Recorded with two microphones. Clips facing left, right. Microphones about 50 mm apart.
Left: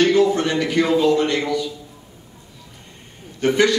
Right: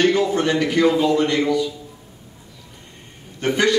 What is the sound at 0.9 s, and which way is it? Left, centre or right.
Speech, right.